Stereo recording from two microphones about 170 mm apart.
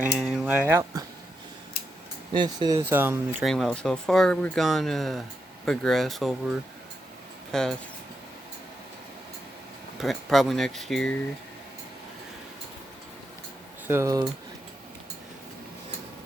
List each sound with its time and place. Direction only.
0.0 s a sound: 5° right (ahead or behind)
2.3 s speech: 25° right (ahead or behind)
2.8 s speech: 10° right (ahead or behind)
3.4 s speech: centre (ahead or behind)
10.0 s speech: centre (ahead or behind)
13.8 s speech: 15° right (ahead or behind)